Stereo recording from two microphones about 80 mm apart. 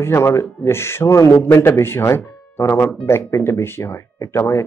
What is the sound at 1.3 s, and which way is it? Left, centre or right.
A man's voice, left.